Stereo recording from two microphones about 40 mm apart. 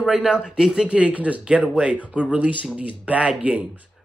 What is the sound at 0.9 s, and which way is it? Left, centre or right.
Speech, right.